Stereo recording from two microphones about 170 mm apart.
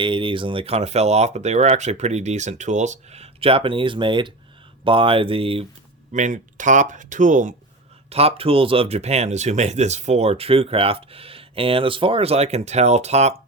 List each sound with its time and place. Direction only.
0.0 s speech: 30° right (ahead or behind)
6.1 s speech: 45° right (ahead or behind)
8.1 s speech: 35° right (ahead or behind)